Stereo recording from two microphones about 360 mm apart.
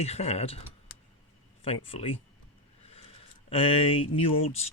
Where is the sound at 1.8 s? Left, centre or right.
Centre.